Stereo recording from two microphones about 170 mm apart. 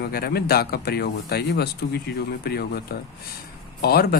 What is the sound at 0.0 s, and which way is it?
Speech, 65° left (ahead or behind).